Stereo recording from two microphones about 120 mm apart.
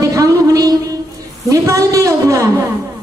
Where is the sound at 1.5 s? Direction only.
25° right (ahead or behind).